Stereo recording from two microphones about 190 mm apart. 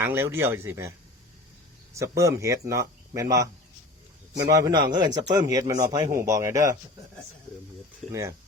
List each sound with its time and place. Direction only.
0.0 s speech: 10° right (ahead or behind)
2.0 s speech: 15° right (ahead or behind)
8.1 s speech: 15° right (ahead or behind)